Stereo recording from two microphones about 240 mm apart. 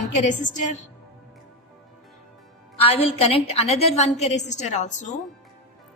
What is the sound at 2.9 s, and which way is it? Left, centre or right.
A woman's voice, left.